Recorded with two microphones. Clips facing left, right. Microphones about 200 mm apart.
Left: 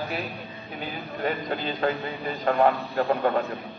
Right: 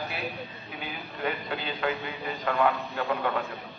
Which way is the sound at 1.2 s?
40° left (ahead or behind).